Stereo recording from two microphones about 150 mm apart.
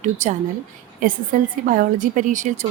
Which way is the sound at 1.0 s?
65° right (ahead or behind).